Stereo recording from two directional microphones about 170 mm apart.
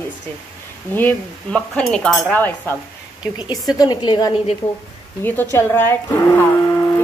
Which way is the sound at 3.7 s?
25° left (ahead or behind).